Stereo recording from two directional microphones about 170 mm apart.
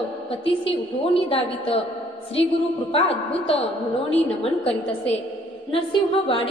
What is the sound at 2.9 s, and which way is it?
Speech, 35° left (ahead or behind).